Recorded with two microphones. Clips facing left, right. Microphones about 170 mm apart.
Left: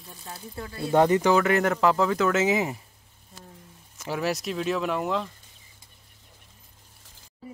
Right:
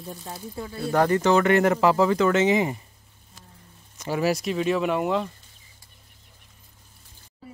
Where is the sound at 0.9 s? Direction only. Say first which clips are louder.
Left 1 dB; 20° left (ahead or behind).